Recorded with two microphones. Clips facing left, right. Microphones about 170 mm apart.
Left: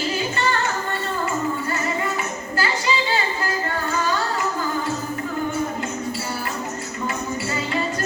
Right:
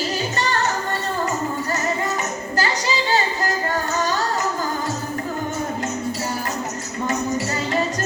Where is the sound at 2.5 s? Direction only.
40° right (ahead or behind).